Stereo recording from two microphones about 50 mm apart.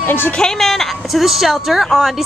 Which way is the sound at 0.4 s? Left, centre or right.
Centre.